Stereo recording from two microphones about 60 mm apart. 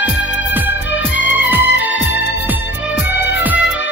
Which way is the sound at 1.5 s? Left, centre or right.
Right.